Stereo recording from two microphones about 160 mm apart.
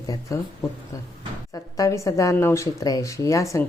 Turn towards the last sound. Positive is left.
turn(degrees=20)  # may be behind; listen again after turning